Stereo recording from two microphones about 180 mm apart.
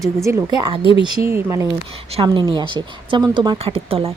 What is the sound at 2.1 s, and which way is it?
Speech, 25° right (ahead or behind).